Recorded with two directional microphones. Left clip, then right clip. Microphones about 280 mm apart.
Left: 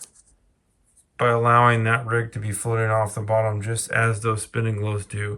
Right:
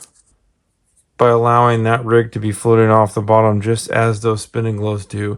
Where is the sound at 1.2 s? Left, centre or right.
Centre.